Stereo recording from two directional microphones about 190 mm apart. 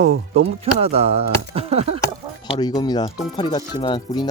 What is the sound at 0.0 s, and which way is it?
Speech, 35° right (ahead or behind).